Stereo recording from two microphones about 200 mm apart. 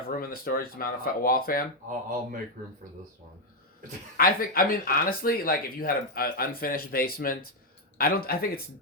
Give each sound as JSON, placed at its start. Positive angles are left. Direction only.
{"t": 0.1, "sound": "speech", "side_deg": 45}
{"t": 1.9, "sound": "speech", "side_deg": -40}
{"t": 4.2, "sound": "speech", "side_deg": 45}